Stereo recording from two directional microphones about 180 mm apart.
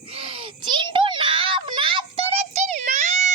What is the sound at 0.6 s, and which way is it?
Child singing, 25° right (ahead or behind).